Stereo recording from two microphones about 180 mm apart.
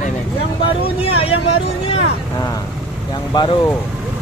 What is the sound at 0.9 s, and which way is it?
Speech, 35° left (ahead or behind).